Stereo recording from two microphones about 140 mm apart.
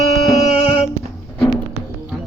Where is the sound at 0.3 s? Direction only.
50° left (ahead or behind).